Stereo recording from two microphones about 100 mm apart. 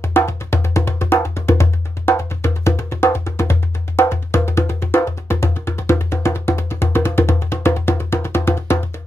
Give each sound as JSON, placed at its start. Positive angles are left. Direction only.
{"t": 0.0, "sound": "music", "side_deg": 25}